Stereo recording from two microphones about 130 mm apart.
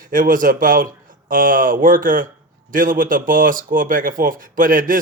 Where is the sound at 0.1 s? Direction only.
90° right.